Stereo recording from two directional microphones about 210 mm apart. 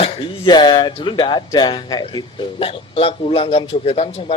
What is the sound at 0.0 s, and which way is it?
Speech, 20° left (ahead or behind).